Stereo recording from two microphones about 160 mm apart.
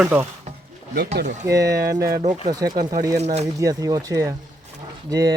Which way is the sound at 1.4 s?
20° right (ahead or behind).